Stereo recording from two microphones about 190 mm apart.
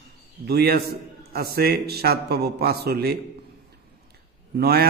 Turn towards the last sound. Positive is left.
turn(degrees=-55)  # may be behind; listen again after turning